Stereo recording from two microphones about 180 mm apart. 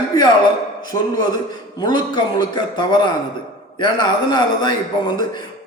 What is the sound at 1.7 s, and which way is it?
A man's voice, 25° left (ahead or behind).